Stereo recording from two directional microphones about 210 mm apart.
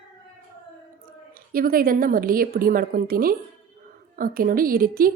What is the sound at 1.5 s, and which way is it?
A woman's voice, 45° right (ahead or behind).